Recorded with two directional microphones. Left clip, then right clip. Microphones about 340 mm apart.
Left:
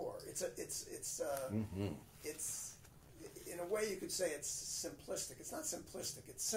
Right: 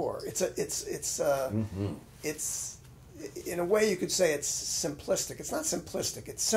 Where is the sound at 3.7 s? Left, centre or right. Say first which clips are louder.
Right 13 dB; right.